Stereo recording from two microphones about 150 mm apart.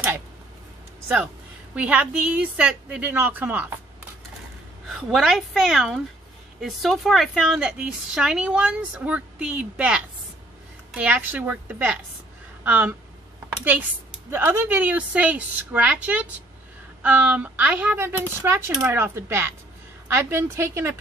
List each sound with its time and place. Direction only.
1.8 s a woman's voice: 10° right (ahead or behind)
4.8 s a woman's voice: centre (ahead or behind); by 20.9 s 20° right (ahead or behind)